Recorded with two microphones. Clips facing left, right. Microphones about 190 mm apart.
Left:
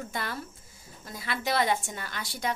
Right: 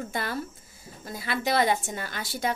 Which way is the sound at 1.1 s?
Centre (ahead or behind).